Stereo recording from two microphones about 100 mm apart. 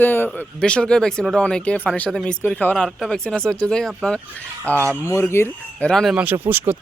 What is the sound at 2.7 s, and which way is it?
Speech, 5° left (ahead or behind).